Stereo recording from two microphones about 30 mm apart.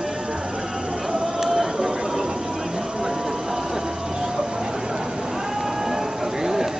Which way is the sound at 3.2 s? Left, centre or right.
Centre.